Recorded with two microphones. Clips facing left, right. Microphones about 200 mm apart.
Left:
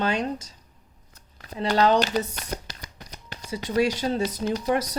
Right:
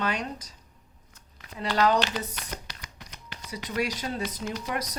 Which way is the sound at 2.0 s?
40° left (ahead or behind).